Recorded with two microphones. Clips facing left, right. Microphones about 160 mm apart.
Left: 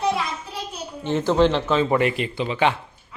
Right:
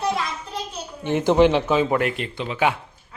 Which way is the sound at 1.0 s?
15° right (ahead or behind).